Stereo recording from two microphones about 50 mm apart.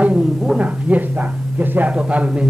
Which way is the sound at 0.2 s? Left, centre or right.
Centre.